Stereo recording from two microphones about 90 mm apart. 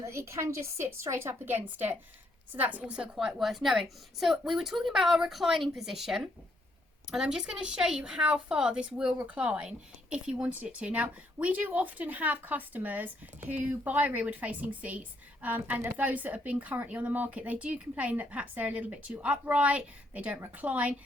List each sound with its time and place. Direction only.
0.0 s a woman's voice: 30° right (ahead or behind); by 3.2 s 15° right (ahead or behind)
3.2 s a woman's voice: centre (ahead or behind); by 20.9 s 15° right (ahead or behind)